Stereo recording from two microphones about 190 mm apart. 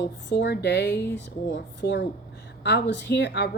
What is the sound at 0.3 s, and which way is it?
Speech, 65° left (ahead or behind).